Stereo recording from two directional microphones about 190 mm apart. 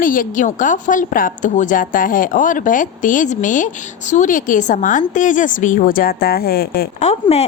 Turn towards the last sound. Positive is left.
turn(degrees=35)  # may be behind; listen again after turning